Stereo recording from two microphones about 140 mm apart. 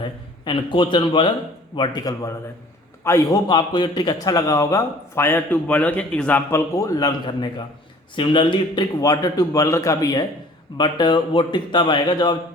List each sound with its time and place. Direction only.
0.4 s a man's voice: 35° left (ahead or behind)